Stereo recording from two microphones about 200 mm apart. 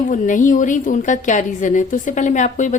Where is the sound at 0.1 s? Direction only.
40° left (ahead or behind).